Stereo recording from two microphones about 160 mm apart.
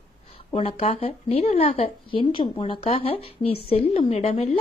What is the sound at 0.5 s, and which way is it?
Speech, 40° left (ahead or behind).